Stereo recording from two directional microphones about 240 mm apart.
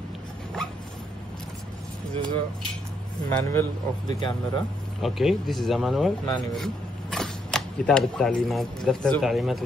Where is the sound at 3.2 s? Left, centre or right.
Centre.